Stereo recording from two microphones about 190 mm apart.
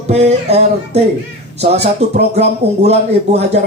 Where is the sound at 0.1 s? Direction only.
35° right (ahead or behind).